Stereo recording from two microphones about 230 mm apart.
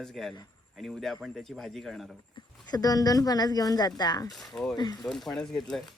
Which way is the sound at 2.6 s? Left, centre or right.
Centre.